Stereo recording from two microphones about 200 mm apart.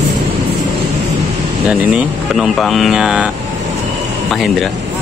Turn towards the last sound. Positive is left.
turn(degrees=-5)  # may be behind; listen again after turning